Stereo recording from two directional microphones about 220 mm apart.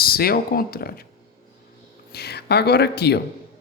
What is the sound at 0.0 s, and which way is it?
Speech, 45° left (ahead or behind).